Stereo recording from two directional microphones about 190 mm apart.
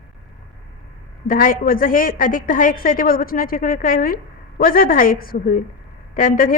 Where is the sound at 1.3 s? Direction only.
45° left (ahead or behind).